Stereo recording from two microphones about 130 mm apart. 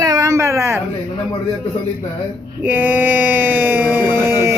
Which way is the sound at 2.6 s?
15° right (ahead or behind).